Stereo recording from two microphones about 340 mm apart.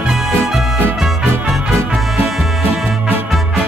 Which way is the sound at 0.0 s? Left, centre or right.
Centre.